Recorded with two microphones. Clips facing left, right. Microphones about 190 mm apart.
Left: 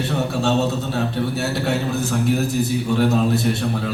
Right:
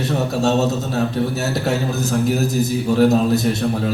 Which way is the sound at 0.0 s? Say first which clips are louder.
Right 2 dB; 40° right (ahead or behind).